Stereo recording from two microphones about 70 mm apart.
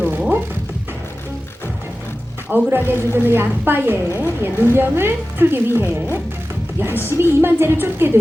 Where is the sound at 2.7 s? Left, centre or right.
Right.